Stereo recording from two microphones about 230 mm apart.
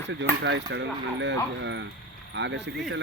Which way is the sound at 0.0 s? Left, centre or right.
Right.